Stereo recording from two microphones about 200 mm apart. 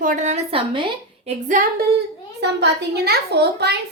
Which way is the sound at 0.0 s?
40° right (ahead or behind).